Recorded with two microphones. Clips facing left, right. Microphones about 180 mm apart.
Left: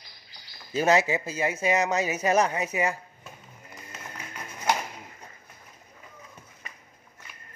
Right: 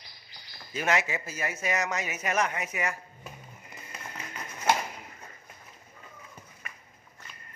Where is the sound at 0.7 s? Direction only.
30° left (ahead or behind).